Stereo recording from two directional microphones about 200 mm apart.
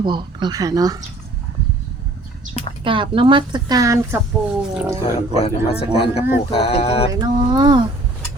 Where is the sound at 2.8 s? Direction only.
25° right (ahead or behind).